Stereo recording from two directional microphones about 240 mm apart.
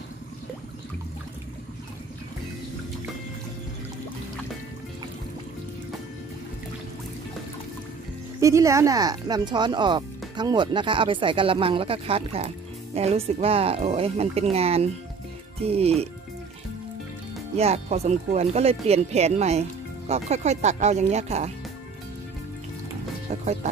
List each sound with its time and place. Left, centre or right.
8.4 s speech: centre
17.6 s speech: right
23.3 s speech: right